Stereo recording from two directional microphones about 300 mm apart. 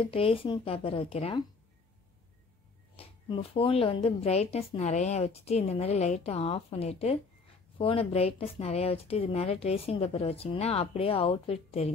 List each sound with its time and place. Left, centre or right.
0.0 s speech: centre
3.0 s speech: centre